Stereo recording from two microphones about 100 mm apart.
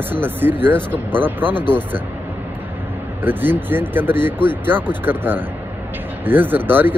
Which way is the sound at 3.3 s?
20° right (ahead or behind).